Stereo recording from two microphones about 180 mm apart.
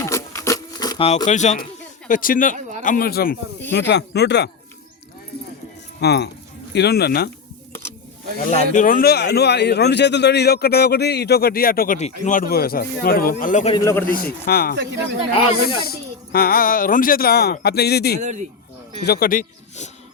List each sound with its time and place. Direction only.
0.0 s a sound: 15° left (ahead or behind)
1.0 s speech: 40° left (ahead or behind); by 3.3 s 60° left (ahead or behind)
3.7 s speech: 75° left (ahead or behind)
6.0 s speech: 65° left (ahead or behind)
8.4 s speech: 45° left (ahead or behind)
13.7 s a man's voice: 15° left (ahead or behind)
14.1 s speech: 55° left (ahead or behind)
15.9 s speech: 60° left (ahead or behind)
18.2 s speech: 40° right (ahead or behind)
19.0 s speech: 60° left (ahead or behind)